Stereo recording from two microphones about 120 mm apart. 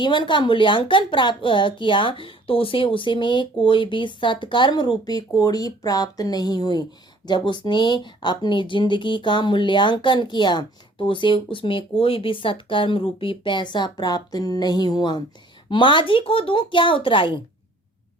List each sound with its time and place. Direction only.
0.0 s a woman's voice: 40° left (ahead or behind)